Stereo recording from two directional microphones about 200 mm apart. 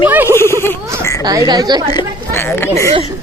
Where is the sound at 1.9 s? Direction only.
15° left (ahead or behind).